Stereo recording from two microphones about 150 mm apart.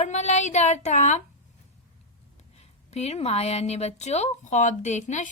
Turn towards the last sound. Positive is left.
turn(degrees=55)  # may be behind; listen again after turning